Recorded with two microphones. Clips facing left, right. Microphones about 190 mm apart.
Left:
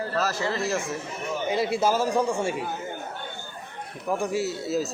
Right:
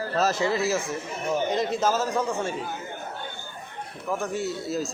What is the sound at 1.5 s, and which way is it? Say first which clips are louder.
A man's voice: left 5 dB; 10° left (ahead or behind).